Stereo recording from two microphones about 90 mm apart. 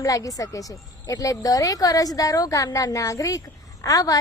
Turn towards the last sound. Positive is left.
turn(degrees=40)  # may be behind; listen again after turning